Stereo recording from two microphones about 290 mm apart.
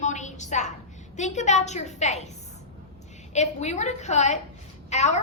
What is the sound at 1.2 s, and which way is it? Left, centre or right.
A woman's voice, left.